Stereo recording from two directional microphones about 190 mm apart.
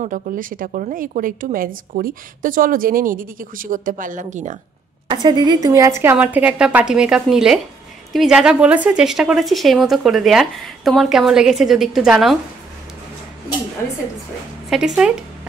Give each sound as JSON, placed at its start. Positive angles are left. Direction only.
{"t": 0.0, "sound": "a woman's voice", "side_deg": -45}
{"t": 5.1, "sound": "a woman's voice", "side_deg": -25}
{"t": 14.7, "sound": "a woman's voice", "side_deg": -5}